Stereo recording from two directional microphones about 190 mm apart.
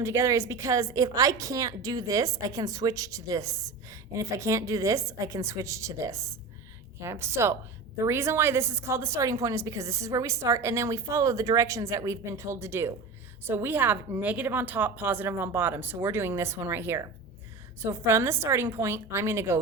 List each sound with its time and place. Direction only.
0.0 s a woman's voice: 15° right (ahead or behind)